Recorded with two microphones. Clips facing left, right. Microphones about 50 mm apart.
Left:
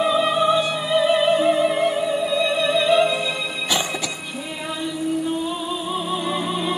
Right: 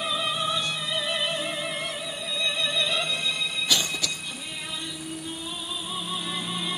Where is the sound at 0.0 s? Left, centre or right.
Centre.